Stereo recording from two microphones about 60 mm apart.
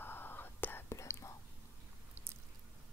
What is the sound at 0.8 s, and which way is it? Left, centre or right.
Whispering, left.